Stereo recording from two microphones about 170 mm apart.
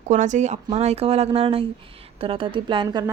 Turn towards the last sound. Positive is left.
turn(degrees=-25)  # may be behind; listen again after turning